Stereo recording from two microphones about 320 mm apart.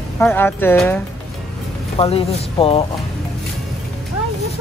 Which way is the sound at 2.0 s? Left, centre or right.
Centre.